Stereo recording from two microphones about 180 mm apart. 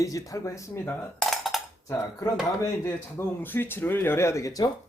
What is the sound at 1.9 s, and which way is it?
Speech, 15° left (ahead or behind).